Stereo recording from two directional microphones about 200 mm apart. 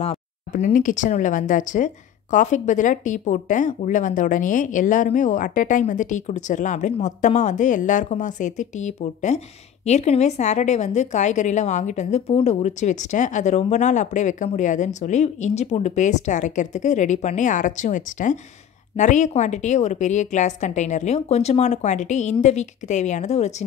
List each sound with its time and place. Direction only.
0.0 s a woman's voice: 35° left (ahead or behind)